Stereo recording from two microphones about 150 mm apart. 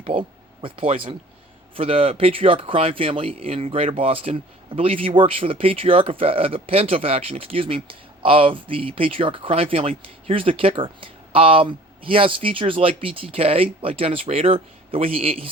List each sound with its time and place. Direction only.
0.0 s speech: 35° right (ahead or behind)